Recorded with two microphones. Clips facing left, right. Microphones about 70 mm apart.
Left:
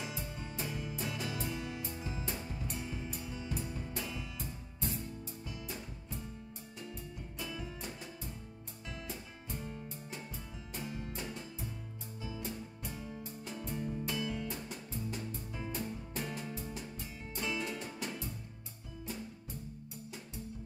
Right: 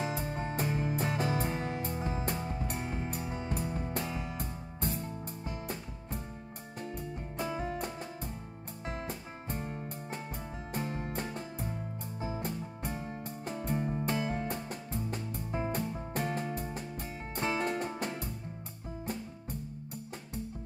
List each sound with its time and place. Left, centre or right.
0.0 s music: right